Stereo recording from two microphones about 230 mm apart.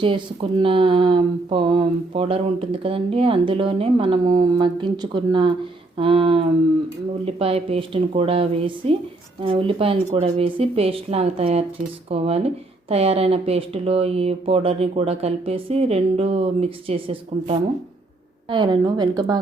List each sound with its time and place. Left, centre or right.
0.0 s a woman's voice: right